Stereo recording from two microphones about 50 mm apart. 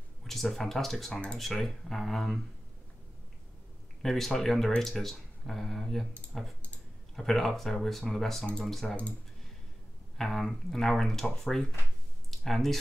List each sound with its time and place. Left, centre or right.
0.2 s speech: centre
4.0 s speech: centre
8.8 s speech: left
10.1 s speech: centre
12.3 s a sound: centre